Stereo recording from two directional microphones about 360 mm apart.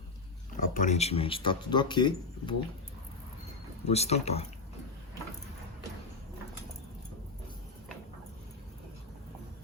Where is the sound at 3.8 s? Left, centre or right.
Centre.